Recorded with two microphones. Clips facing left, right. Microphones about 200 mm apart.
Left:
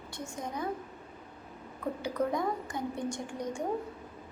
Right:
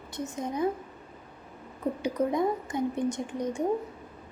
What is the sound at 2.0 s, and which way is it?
A woman's voice, 20° right (ahead or behind).